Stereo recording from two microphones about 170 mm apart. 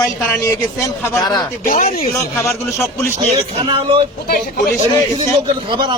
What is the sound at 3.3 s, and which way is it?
Speech, 30° right (ahead or behind).